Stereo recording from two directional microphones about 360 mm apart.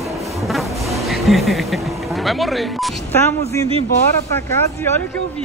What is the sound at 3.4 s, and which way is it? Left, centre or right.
Speech, centre.